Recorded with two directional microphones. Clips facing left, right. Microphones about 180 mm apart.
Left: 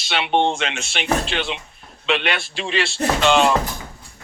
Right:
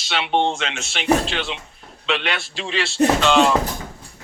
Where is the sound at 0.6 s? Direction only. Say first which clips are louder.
Right 3 dB; 60° left (ahead or behind).